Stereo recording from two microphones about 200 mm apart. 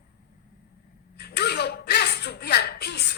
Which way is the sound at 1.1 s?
55° left (ahead or behind).